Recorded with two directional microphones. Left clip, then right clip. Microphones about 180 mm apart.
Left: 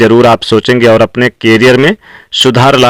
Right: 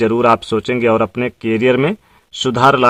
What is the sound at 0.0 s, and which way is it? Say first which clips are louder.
Speech: left 8 dB; 30° left (ahead or behind).